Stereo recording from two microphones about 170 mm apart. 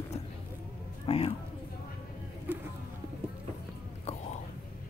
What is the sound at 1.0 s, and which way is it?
Speech, 35° left (ahead or behind).